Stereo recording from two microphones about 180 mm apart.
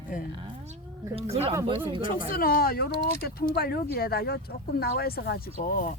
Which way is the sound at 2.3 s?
55° left (ahead or behind).